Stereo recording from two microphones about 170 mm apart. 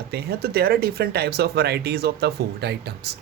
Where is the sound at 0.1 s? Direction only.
70° right (ahead or behind).